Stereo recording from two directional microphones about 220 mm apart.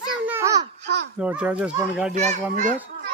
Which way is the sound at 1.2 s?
5° right (ahead or behind).